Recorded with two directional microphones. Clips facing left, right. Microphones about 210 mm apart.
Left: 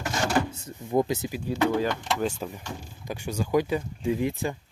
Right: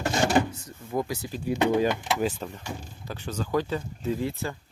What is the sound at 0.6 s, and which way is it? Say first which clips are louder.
Speech: left 5 dB; 20° left (ahead or behind).